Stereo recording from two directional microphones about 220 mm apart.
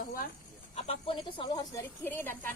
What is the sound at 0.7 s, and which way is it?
A woman's voice, 25° left (ahead or behind).